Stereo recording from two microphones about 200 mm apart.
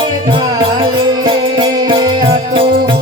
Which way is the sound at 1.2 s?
25° right (ahead or behind).